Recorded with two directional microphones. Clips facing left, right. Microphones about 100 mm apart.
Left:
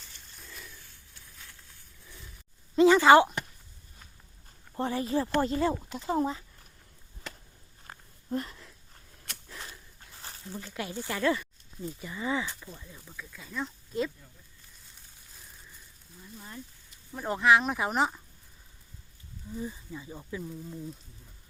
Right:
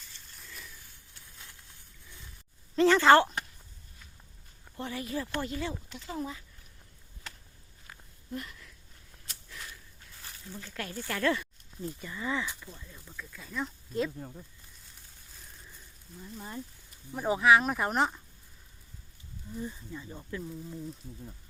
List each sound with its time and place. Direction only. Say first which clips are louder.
2.7 s speech: left 2 dB; 10° left (ahead or behind)
4.8 s speech: left 6 dB; 35° left (ahead or behind)
7.9 s a sound: left 6 dB; 40° left (ahead or behind)
9.5 s dog: left 1 dB; 35° left (ahead or behind)
10.2 s a sound: left 4 dB; 35° left (ahead or behind)
10.6 s speech: left 2 dB; 10° left (ahead or behind)
12.0 s speech: left 3 dB; 10° left (ahead or behind)
14.2 s speech: right 14 dB; 50° right (ahead or behind)
16.2 s speech: right 4 dB; 20° right (ahead or behind)
17.1 s speech: even; 10° right (ahead or behind)
19.5 s speech: left 1 dB; 5° left (ahead or behind)